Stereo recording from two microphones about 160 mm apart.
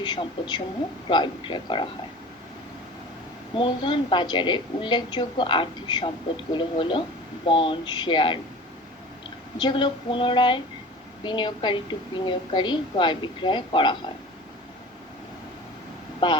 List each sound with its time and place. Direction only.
0.0 s a woman's voice: 30° left (ahead or behind)
3.5 s a woman's voice: 30° left (ahead or behind)
9.6 s a woman's voice: 30° left (ahead or behind)
16.2 s a woman's voice: 30° left (ahead or behind)